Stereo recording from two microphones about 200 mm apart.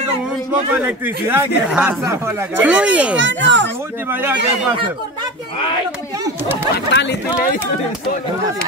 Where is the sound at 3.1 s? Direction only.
65° right (ahead or behind).